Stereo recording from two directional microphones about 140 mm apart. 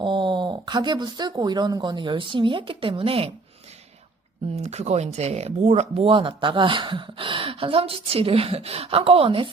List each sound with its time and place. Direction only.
0.0 s speech: 35° right (ahead or behind)
4.5 s speech: 50° right (ahead or behind)